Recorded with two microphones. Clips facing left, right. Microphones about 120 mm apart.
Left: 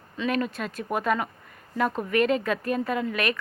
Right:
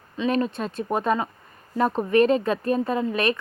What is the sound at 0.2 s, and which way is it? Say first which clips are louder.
Speech: right 3 dB; 30° right (ahead or behind).